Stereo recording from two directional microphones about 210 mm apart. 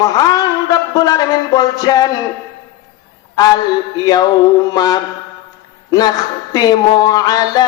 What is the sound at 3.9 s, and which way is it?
A man's voice, 20° left (ahead or behind).